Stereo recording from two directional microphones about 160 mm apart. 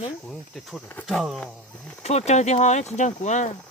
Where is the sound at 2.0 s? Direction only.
40° left (ahead or behind).